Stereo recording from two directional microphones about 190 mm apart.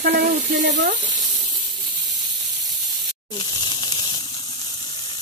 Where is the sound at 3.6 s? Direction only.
25° left (ahead or behind).